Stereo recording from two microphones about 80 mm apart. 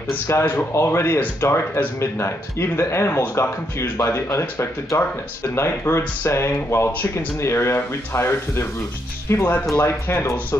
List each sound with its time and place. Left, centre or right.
0.3 s speech: left